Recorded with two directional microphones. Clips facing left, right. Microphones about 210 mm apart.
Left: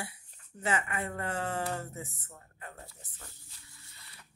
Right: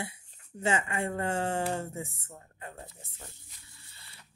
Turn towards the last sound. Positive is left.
turn(degrees=-25)  # may be behind; listen again after turning